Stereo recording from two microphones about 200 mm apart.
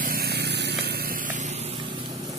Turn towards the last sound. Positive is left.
turn(degrees=-35)  # may be behind; listen again after turning